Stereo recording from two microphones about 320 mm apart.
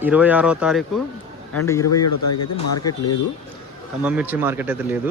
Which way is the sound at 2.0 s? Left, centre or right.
Left.